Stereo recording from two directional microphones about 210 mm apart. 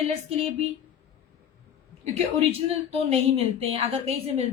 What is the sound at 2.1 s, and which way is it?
Speech, 30° right (ahead or behind).